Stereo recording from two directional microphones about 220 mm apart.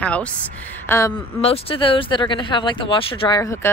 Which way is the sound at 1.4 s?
25° left (ahead or behind).